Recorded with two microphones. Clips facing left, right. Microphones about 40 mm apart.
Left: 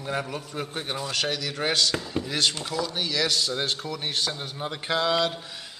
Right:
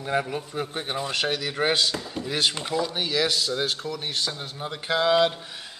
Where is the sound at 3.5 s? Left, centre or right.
Centre.